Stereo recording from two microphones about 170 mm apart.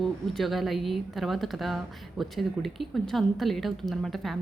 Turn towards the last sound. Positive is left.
turn(degrees=0)  # may be behind; listen again after turning